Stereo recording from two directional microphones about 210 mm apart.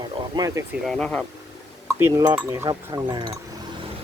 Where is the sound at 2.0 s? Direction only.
10° right (ahead or behind).